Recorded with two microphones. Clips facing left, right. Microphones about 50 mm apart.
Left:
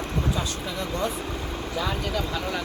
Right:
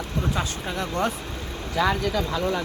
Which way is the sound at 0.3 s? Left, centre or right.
Right.